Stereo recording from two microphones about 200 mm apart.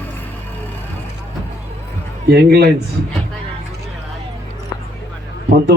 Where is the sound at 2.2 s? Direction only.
55° right (ahead or behind).